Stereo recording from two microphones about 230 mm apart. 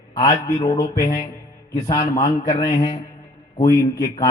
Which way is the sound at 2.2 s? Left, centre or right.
Left.